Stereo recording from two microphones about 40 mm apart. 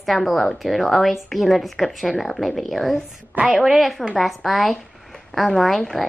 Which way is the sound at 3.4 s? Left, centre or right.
Right.